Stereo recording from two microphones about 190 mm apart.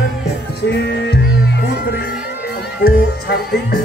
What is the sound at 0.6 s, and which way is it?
Music, 60° left (ahead or behind).